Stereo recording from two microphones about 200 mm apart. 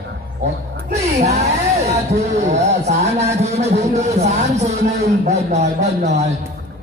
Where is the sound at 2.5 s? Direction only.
35° right (ahead or behind).